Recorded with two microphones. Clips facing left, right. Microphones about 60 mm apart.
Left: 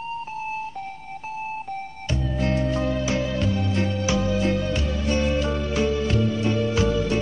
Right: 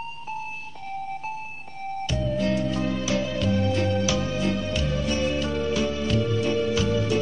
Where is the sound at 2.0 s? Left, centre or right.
Left.